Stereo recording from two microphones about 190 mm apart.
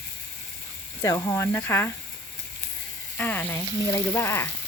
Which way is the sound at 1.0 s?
15° left (ahead or behind).